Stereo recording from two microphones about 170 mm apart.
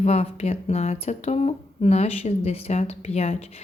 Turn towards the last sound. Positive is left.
turn(degrees=40)  # may be behind; listen again after turning